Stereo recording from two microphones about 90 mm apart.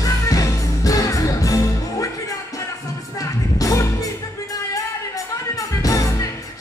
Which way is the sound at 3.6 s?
40° left (ahead or behind).